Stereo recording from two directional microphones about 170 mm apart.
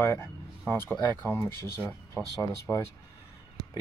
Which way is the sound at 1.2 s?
15° left (ahead or behind).